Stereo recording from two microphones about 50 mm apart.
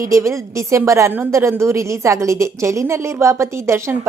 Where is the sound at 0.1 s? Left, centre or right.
Right.